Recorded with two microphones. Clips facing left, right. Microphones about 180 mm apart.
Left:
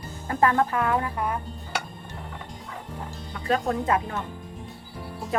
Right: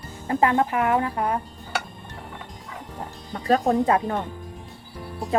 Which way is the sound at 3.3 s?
40° right (ahead or behind).